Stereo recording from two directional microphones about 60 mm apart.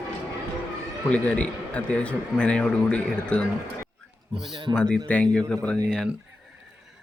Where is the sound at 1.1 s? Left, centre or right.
Left.